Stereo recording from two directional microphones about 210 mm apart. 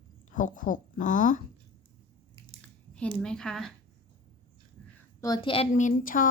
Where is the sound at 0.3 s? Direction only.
40° left (ahead or behind).